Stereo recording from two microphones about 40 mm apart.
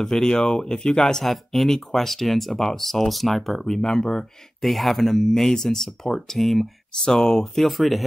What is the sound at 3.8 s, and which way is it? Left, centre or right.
Speech, centre.